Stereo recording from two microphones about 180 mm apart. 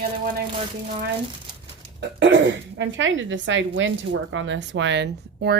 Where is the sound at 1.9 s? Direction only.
85° right.